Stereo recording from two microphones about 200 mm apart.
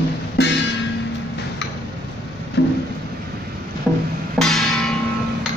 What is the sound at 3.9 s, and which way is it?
Music, 5° right (ahead or behind).